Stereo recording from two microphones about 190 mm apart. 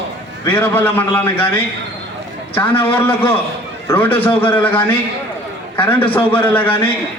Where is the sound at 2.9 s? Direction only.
10° left (ahead or behind).